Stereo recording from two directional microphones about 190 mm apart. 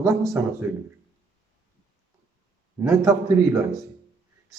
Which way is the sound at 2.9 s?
15° right (ahead or behind).